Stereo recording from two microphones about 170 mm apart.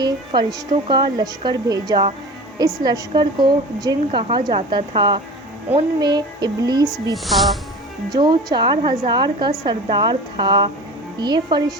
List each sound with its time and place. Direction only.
0.0 s a woman's voice: 25° right (ahead or behind)
7.3 s speech: centre (ahead or behind)
8.2 s a woman's voice: 25° right (ahead or behind)